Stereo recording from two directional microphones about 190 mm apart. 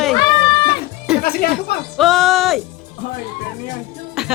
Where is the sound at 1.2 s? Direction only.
50° left (ahead or behind).